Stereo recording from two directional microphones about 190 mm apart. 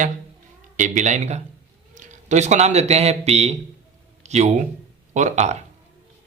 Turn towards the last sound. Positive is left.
turn(degrees=-35)  # may be behind; listen again after turning